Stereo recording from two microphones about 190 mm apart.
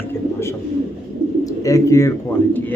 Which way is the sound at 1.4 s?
15° left (ahead or behind).